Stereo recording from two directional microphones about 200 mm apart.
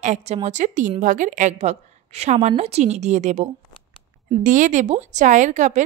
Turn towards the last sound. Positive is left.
turn(degrees=-35)  # may be behind; listen again after turning